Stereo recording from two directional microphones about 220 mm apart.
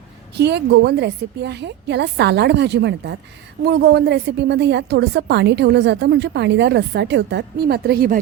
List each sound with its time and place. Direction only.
0.3 s a woman's voice: 50° right (ahead or behind)